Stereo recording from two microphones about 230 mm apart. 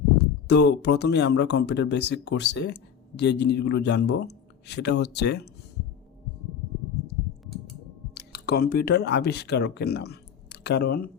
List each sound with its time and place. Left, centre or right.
0.4 s speech: left
8.1 s speech: left